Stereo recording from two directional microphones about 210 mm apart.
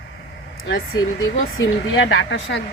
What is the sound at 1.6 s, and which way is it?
Speech, 65° left (ahead or behind).